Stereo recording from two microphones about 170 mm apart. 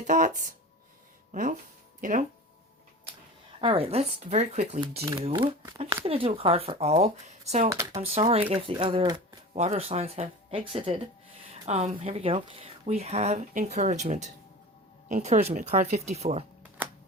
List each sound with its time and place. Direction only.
0.1 s speech: 50° right (ahead or behind)
3.6 s speech: 35° right (ahead or behind)
5.2 s speech: 30° right (ahead or behind)
7.7 s speech: 20° right (ahead or behind)
8.0 s speech: 35° right (ahead or behind)
16.8 s typewriter: 10° right (ahead or behind)